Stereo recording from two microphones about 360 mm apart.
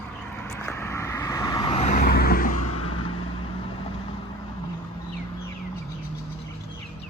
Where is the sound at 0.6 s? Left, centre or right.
Centre.